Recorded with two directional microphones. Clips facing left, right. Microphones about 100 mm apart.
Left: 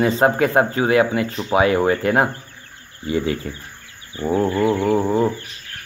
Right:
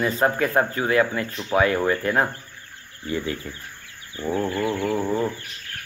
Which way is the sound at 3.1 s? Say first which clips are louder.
Left 6 dB; 90° left.